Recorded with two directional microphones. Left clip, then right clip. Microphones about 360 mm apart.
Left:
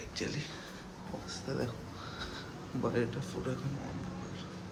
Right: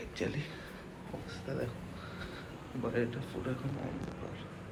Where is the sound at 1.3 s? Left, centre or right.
Centre.